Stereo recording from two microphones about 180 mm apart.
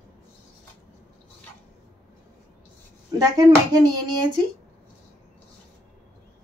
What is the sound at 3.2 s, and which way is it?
Speech, 20° right (ahead or behind).